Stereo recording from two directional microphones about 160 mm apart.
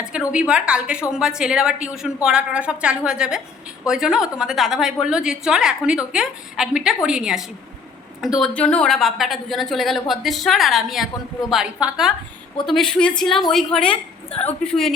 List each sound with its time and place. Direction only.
0.1 s a woman's voice: 5° right (ahead or behind)